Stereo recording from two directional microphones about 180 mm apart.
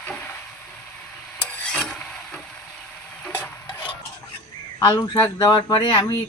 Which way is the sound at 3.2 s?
10° left (ahead or behind).